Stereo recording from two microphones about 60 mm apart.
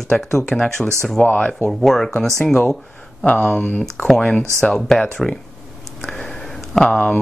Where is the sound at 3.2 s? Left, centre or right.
Left.